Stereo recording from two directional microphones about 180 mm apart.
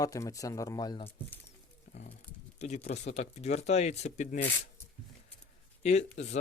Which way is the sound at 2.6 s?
40° left (ahead or behind).